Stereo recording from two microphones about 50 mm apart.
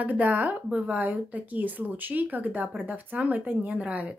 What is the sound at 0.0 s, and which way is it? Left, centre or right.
Speech, right.